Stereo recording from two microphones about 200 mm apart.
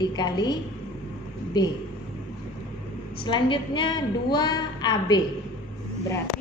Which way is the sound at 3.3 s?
25° left (ahead or behind).